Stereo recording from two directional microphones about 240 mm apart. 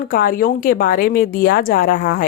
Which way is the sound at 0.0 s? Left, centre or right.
Left.